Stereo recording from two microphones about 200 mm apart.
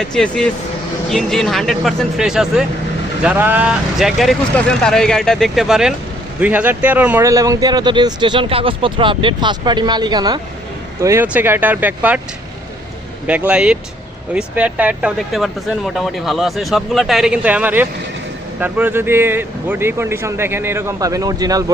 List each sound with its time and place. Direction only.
0.1 s speech: 5° left (ahead or behind)
13.2 s speech: 5° right (ahead or behind)